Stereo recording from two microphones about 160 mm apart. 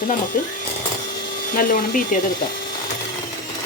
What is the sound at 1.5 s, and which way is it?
Speech, 60° left (ahead or behind).